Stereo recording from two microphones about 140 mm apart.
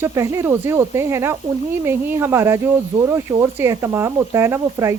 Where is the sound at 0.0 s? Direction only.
20° right (ahead or behind).